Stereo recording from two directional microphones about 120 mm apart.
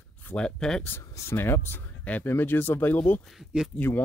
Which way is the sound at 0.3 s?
5° left (ahead or behind).